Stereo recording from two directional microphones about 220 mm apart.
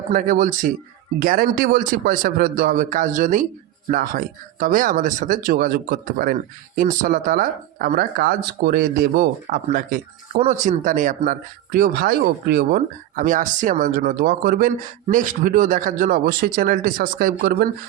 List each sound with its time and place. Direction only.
0.1 s speech: 40° right (ahead or behind)